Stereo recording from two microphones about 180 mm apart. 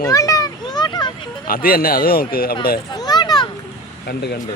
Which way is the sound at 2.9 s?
25° left (ahead or behind).